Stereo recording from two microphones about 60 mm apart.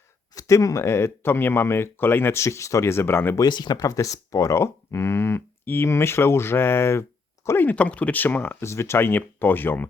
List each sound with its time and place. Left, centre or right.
0.3 s speech: left
3.3 s speech: left
7.8 s speech: left
8.6 s speech: left